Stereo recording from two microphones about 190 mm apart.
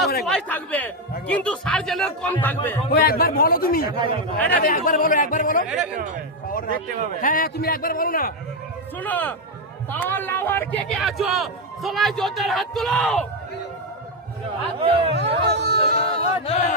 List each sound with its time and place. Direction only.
0.3 s speech: 5° left (ahead or behind)
2.9 s a man's voice: 50° left (ahead or behind)
5.6 s speech: 5° right (ahead or behind)
7.2 s a man's voice: 45° left (ahead or behind)
9.0 s speech: 10° left (ahead or behind)
14.8 s speech: 30° right (ahead or behind)
15.1 s speech: 60° right (ahead or behind)
16.0 s crowd: 35° left (ahead or behind)